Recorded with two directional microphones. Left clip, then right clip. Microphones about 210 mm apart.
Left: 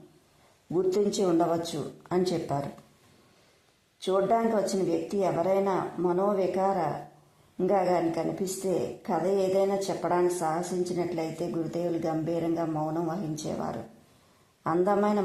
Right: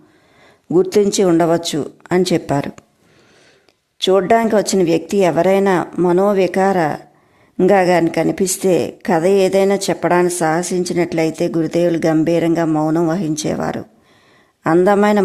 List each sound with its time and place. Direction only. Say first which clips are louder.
0.7 s a woman's voice: right 12 dB; 40° right (ahead or behind)
4.0 s a woman's voice: right 12 dB; 40° right (ahead or behind)